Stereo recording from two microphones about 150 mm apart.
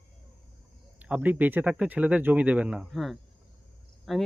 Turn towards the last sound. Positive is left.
turn(degrees=0)  # may be behind; listen again after turning